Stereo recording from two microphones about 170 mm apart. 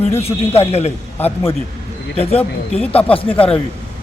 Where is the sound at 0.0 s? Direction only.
35° left (ahead or behind).